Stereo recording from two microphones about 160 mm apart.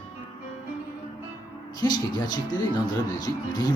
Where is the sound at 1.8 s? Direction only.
25° left (ahead or behind).